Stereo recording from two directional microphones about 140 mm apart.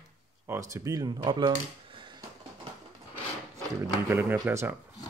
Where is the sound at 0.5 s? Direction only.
20° right (ahead or behind).